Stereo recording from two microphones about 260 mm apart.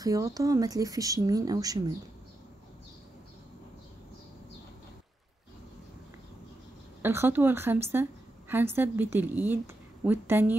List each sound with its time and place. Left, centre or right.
0.0 s a woman's voice: centre
7.0 s a woman's voice: centre